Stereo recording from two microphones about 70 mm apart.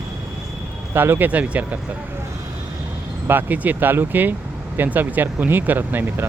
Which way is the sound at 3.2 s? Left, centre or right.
Right.